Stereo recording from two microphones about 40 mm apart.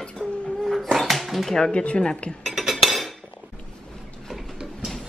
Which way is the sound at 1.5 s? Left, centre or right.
Centre.